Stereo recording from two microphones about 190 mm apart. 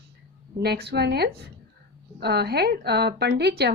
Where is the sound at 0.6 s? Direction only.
60° right (ahead or behind).